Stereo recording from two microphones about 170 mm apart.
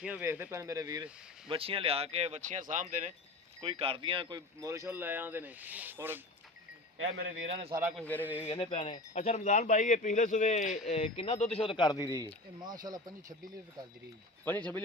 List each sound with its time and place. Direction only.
0.0 s speech: 10° right (ahead or behind)
1.5 s speech: 35° right (ahead or behind); by 3.1 s 50° right (ahead or behind)
3.6 s speech: 35° right (ahead or behind); by 6.2 s 10° right (ahead or behind)
7.4 s speech: 35° right (ahead or behind)
7.7 s speech: 15° right (ahead or behind)
7.9 s a man's voice: 10° left (ahead or behind)
8.5 s speech: 30° left (ahead or behind)
12.2 s speech: 25° right (ahead or behind)
14.4 s a man's voice: 10° left (ahead or behind)